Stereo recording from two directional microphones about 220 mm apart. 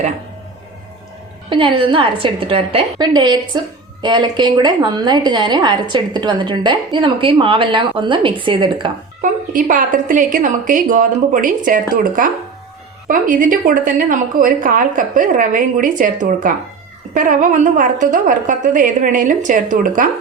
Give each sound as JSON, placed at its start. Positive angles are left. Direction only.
{"t": 1.5, "sound": "a woman's voice", "side_deg": -25}
{"t": 9.2, "sound": "a woman's voice", "side_deg": -35}